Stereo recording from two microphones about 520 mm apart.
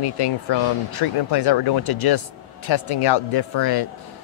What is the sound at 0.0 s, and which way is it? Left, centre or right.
Speech, left.